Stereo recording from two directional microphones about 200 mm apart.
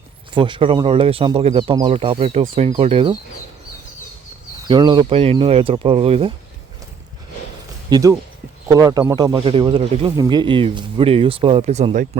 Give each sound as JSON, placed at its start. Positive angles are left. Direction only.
{"t": 0.3, "sound": "speech", "side_deg": -25}
{"t": 4.7, "sound": "speech", "side_deg": -20}
{"t": 7.9, "sound": "speech", "side_deg": -20}